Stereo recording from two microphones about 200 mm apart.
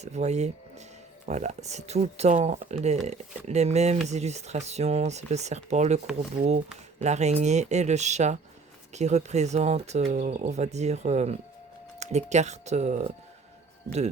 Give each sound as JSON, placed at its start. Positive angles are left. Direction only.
{"t": 0.0, "sound": "speech", "side_deg": -35}